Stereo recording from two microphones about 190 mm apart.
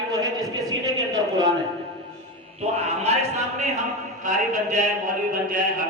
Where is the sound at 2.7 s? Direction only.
35° right (ahead or behind).